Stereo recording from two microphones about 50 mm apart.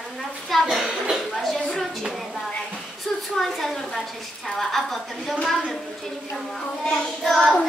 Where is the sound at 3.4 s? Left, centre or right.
Centre.